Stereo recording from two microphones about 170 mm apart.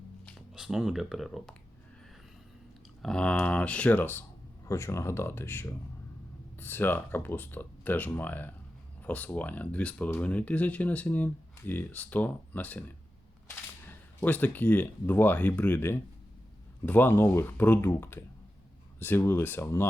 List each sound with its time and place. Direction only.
0.3 s speech: centre (ahead or behind)
3.0 s speech: 5° left (ahead or behind)